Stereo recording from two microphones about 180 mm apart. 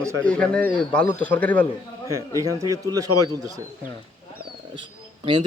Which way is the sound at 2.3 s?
20° right (ahead or behind).